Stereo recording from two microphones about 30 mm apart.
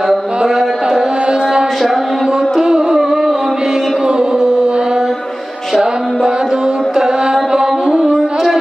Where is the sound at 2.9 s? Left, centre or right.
Centre.